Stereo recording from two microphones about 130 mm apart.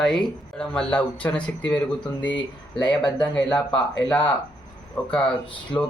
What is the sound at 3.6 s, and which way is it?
Speech, 10° left (ahead or behind).